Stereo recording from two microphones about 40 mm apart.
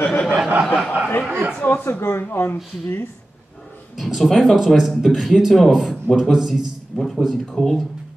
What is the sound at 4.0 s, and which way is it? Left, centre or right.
Speech, centre.